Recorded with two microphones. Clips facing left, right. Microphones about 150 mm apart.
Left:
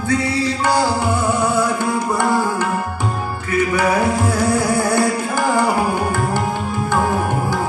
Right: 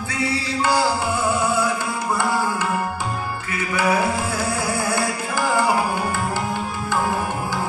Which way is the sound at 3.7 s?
55° left (ahead or behind).